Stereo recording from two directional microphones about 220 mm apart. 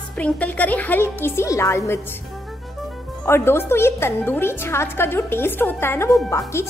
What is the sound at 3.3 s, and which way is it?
Speech, 10° left (ahead or behind).